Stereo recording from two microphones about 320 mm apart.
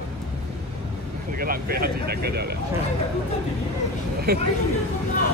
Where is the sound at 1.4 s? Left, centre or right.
Right.